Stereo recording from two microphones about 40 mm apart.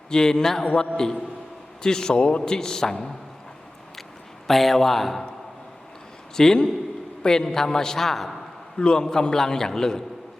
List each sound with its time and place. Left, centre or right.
0.1 s a man's voice: centre
4.4 s a man's voice: centre
6.3 s a man's voice: centre
8.8 s a man's voice: left